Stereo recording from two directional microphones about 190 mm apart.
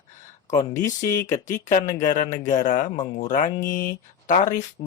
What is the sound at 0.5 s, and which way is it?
Speech, 20° left (ahead or behind).